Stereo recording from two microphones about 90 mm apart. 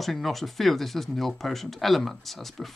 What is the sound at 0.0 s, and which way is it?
Speech, centre (ahead or behind).